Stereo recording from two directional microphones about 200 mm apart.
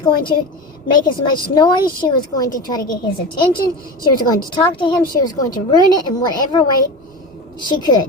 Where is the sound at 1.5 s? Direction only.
25° left (ahead or behind).